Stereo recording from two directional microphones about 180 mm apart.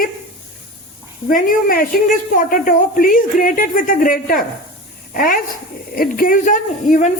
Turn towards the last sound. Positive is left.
turn(degrees=45)  # may be behind; listen again after turning